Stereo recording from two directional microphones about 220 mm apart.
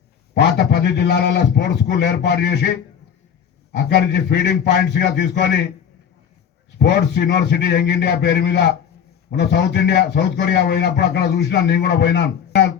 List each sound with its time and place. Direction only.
0.3 s a man's voice: 50° left (ahead or behind)
3.7 s a man's voice: 50° left (ahead or behind)
6.7 s a man's voice: 50° left (ahead or behind)